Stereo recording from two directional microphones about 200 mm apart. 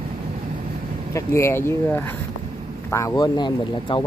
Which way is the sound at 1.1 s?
15° left (ahead or behind).